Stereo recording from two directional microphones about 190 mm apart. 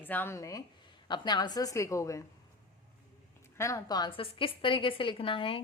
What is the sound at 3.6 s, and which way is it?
A woman's voice, 15° left (ahead or behind).